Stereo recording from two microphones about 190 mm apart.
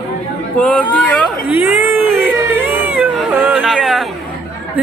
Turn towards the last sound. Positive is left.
turn(degrees=0)  # may be behind; listen again after turning